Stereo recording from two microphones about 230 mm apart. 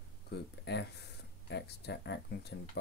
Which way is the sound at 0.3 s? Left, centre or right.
Left.